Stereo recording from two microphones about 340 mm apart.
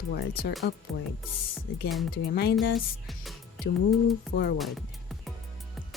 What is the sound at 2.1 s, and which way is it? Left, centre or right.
Speech, left.